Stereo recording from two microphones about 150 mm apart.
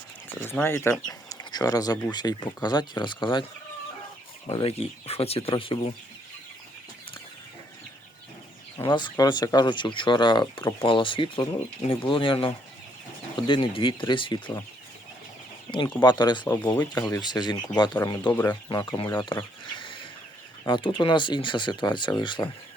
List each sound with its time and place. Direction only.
0.3 s speech: 15° left (ahead or behind); by 3.4 s 30° left (ahead or behind)
4.4 s speech: 40° left (ahead or behind)
8.9 s speech: 30° left (ahead or behind)
15.7 s speech: 30° left (ahead or behind)
18.3 s speech: 10° left (ahead or behind)
18.7 s speech: 25° left (ahead or behind)